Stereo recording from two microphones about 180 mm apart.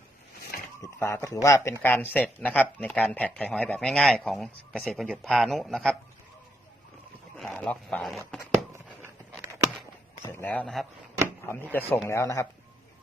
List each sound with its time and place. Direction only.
0.8 s a man's voice: 15° left (ahead or behind)
7.3 s speech: centre (ahead or behind)
8.5 s a sound: 15° right (ahead or behind)
10.2 s speech: 10° left (ahead or behind)